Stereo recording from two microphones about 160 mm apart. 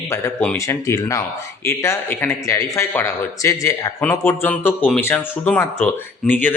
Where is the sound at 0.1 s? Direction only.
15° left (ahead or behind).